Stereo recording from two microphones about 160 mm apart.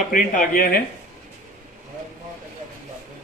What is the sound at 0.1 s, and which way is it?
Speech, 60° left (ahead or behind).